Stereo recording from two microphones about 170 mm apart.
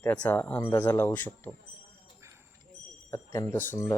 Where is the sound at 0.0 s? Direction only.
10° left (ahead or behind).